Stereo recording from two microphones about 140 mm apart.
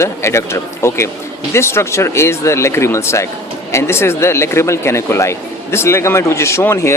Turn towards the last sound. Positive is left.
turn(degrees=20)  # may be behind; listen again after turning